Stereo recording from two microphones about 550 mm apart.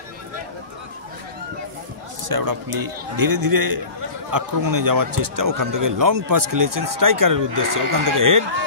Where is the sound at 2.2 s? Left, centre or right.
Right.